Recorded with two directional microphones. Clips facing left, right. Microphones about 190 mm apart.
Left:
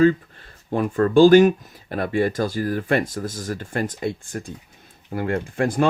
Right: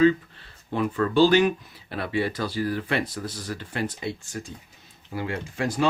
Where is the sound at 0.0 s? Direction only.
45° left (ahead or behind).